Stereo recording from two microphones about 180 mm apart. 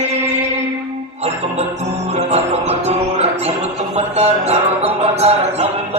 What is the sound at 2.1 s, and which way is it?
Music, 35° right (ahead or behind).